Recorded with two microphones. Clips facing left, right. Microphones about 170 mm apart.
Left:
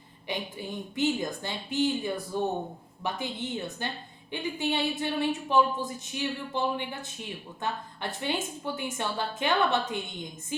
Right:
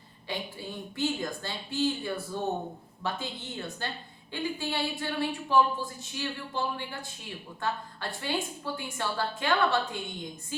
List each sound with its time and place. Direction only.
0.3 s speech: 20° left (ahead or behind)